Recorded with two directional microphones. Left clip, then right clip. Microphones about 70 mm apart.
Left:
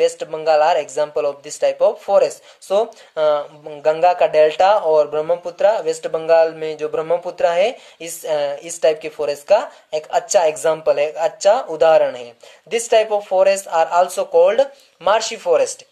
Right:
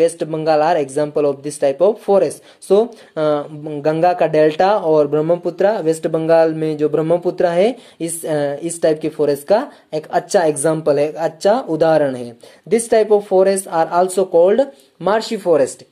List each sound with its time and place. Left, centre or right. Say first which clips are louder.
0.0 s a woman's voice: right 2 dB; right